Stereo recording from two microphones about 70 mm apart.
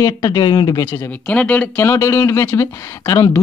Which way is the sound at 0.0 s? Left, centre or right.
Left.